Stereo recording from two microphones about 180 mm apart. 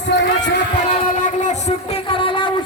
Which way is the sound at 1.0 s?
40° left (ahead or behind).